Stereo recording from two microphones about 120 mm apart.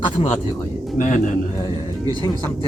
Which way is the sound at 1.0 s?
90° left.